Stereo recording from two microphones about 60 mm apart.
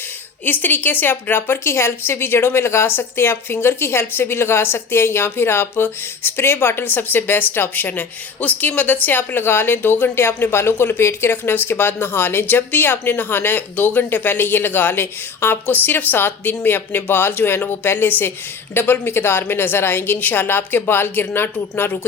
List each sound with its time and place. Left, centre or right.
0.4 s a woman's voice: left